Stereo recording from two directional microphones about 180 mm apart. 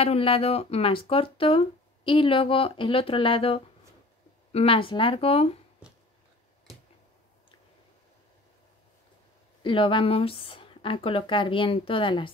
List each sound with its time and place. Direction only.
0.0 s speech: 30° left (ahead or behind)
9.6 s speech: 30° left (ahead or behind)